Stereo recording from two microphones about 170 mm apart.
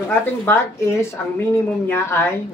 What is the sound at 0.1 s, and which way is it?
A woman's voice, 15° left (ahead or behind).